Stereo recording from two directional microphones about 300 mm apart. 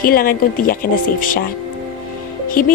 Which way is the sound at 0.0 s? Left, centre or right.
Left.